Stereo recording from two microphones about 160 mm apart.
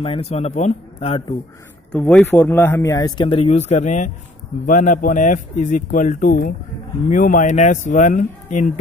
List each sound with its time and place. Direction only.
0.0 s speech: 35° left (ahead or behind)
1.9 s speech: 5° left (ahead or behind); by 8.6 s 50° left (ahead or behind)